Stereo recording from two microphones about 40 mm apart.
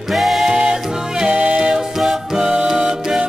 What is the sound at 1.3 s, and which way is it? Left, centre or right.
Music, right.